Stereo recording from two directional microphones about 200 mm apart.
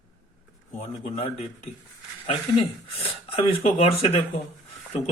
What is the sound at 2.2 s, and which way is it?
Speech, 30° left (ahead or behind).